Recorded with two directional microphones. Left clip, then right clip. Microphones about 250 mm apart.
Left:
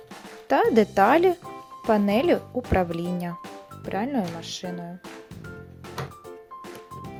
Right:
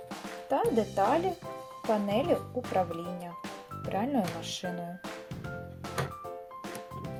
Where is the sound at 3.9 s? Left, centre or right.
Centre.